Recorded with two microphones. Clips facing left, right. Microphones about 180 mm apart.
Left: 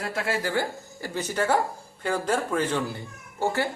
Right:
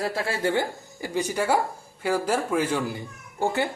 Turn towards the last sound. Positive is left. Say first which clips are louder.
# right 1 dB
turn(degrees=-15)  # may be behind; listen again after turning